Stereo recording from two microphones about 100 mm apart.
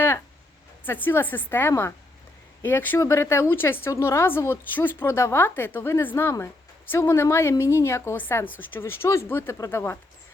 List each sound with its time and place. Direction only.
0.9 s a woman's voice: 20° left (ahead or behind)